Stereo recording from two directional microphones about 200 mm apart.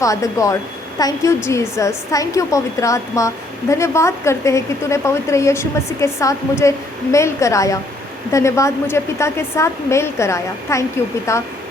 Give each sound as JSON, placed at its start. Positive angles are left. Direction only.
{"t": 0.0, "sound": "a woman's voice", "side_deg": 15}